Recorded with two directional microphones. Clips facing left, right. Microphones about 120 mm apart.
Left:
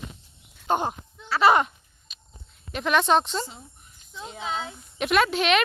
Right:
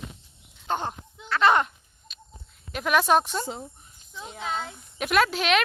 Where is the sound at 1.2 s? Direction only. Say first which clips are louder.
Left 2 dB; 5° left (ahead or behind).